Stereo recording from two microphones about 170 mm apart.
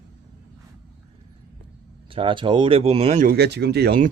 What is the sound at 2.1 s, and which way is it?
Speech, 30° right (ahead or behind).